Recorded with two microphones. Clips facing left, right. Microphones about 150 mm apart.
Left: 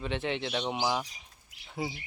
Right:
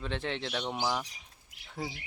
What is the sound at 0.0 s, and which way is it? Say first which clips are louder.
Speech: left 3 dB; 5° left (ahead or behind).